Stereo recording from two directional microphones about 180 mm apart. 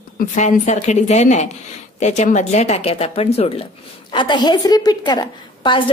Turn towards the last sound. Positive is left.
turn(degrees=25)  # may be behind; listen again after turning